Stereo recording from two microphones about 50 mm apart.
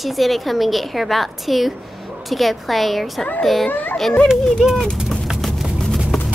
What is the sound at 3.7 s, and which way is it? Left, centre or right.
Speech, left.